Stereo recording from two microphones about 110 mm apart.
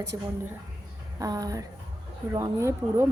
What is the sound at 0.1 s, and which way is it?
A woman's voice, 30° right (ahead or behind).